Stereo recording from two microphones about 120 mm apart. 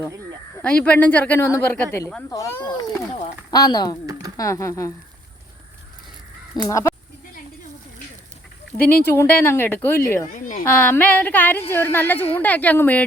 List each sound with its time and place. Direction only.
0.6 s a woman's voice: 10° left (ahead or behind)
2.6 s speech: 35° left (ahead or behind)
4.0 s a sound: 30° right (ahead or behind)
4.4 s a woman's voice: 30° left (ahead or behind)
6.6 s a woman's voice: 25° left (ahead or behind)
8.8 s a woman's voice: 15° left (ahead or behind)